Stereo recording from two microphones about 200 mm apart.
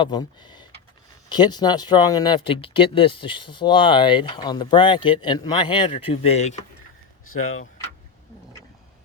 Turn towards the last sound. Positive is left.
turn(degrees=90)